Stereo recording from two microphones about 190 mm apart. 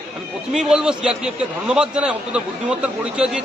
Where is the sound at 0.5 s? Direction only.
5° right (ahead or behind).